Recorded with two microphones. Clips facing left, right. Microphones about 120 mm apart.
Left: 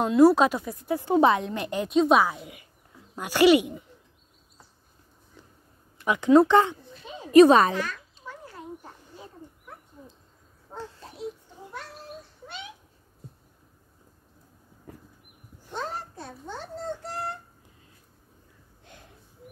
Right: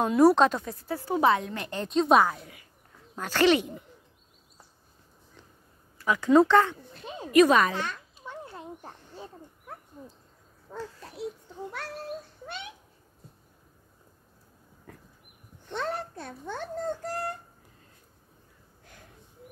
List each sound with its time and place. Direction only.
0.0 s speech: centre (ahead or behind)
3.2 s speech: 10° left (ahead or behind)
5.9 s speech: 20° left (ahead or behind)
7.3 s speech: 30° left (ahead or behind)
7.7 s a sound: 25° right (ahead or behind)
15.7 s a sound: 65° right (ahead or behind); by 17.2 s 50° right (ahead or behind)